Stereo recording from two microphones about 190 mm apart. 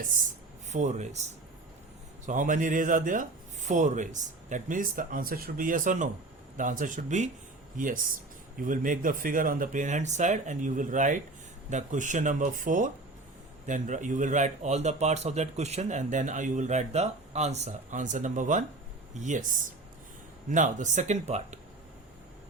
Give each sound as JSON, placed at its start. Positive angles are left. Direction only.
{"t": 0.7, "sound": "speech", "side_deg": -40}
{"t": 2.2, "sound": "speech", "side_deg": -45}